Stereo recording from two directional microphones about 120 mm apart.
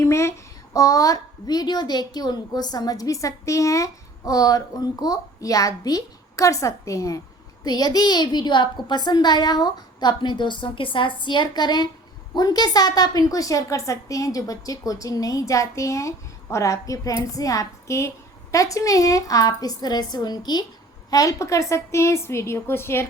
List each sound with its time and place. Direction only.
0.0 s a child's voice: 25° left (ahead or behind)